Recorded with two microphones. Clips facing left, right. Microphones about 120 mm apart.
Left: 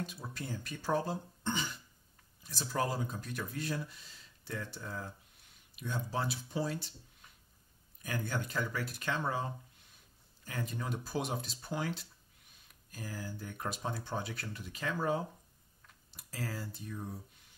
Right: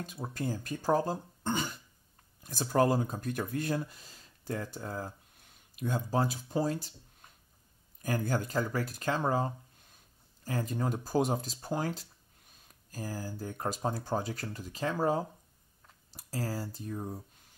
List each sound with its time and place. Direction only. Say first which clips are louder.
0.0 s speech: right 6 dB; 45° right (ahead or behind)